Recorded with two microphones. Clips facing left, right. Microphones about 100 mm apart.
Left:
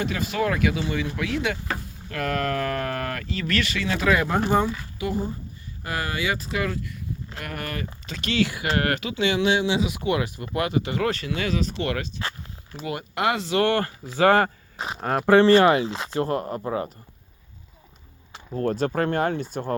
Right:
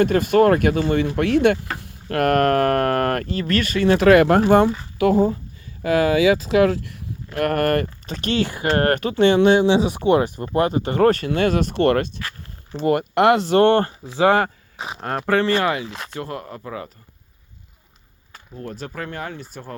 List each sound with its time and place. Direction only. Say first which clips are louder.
0.0 s speech: right 10 dB; 55° right (ahead or behind); by 6.8 s 85° right
7.3 s speech: right 17 dB; 65° right (ahead or behind)
8.0 s speech: right 2 dB; 40° right (ahead or behind)
9.6 s speech: right 7 dB; 30° right (ahead or behind); by 13.5 s 60° right (ahead or behind)
13.5 s speech: right 7 dB; 30° right (ahead or behind); by 14.4 s 15° right (ahead or behind)
14.4 s speech: even; centre (ahead or behind)
15.3 s speech: left 4 dB; 25° left (ahead or behind)
18.5 s speech: left 8 dB; 55° left (ahead or behind)